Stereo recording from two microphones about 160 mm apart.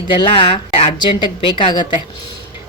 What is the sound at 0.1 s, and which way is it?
A woman's voice, 30° left (ahead or behind).